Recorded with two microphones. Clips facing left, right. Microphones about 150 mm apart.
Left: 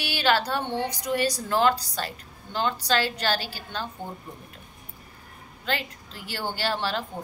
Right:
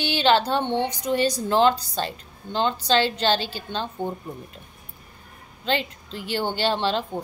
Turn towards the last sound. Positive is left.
turn(degrees=-20)  # may be behind; listen again after turning